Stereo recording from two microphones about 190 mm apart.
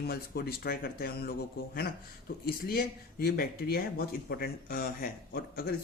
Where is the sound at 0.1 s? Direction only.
55° left (ahead or behind).